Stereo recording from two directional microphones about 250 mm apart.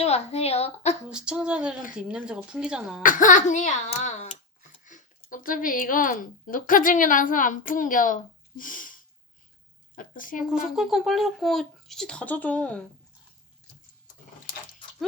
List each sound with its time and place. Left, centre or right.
0.0 s a woman's voice: left
1.1 s speech: centre
3.0 s a child's voice: left
10.4 s speech: centre